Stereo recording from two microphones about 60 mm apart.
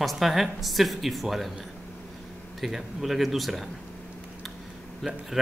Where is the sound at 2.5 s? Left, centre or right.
Centre.